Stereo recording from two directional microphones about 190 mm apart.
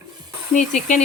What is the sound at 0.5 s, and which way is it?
Speech, 40° left (ahead or behind).